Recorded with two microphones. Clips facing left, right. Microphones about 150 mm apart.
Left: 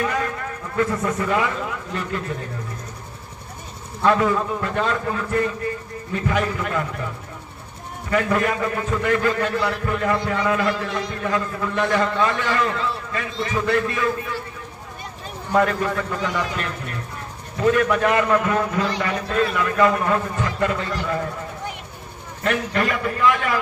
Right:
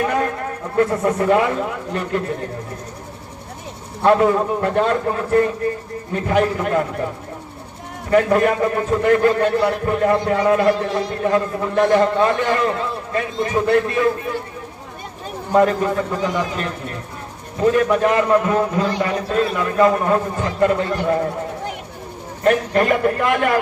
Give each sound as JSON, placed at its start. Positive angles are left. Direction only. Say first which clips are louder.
{"t": 0.0, "sound": "a sound", "louder": "right 4 dB", "side_deg": -50}
{"t": 0.8, "sound": "a man's voice", "louder": "right 5 dB", "side_deg": -50}
{"t": 4.0, "sound": "a man's voice", "louder": "right 4 dB", "side_deg": -50}
{"t": 8.1, "sound": "a man's voice", "louder": "right 6 dB", "side_deg": -45}
{"t": 15.5, "sound": "a man's voice", "louder": "right 4 dB", "side_deg": -35}
{"t": 22.4, "sound": "a man's voice", "louder": "right 6 dB", "side_deg": -45}